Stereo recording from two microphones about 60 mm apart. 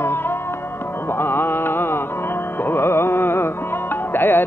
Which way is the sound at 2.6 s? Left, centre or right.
Left.